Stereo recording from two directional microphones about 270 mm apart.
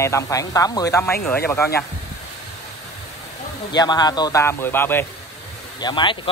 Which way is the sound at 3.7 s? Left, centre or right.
Centre.